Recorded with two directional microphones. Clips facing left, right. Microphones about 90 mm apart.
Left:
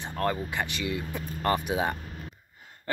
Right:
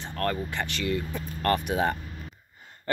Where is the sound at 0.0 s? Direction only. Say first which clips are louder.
Even; 15° left (ahead or behind).